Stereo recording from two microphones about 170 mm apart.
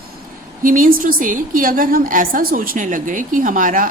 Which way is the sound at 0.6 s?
50° right (ahead or behind).